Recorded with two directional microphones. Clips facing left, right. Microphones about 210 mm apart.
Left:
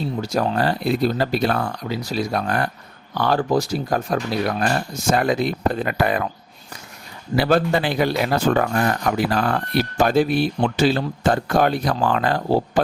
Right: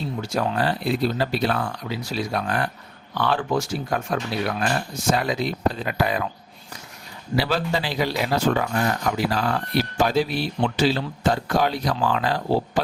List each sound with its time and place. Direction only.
0.2 s speech: 40° left (ahead or behind)
7.3 s speech: 50° left (ahead or behind)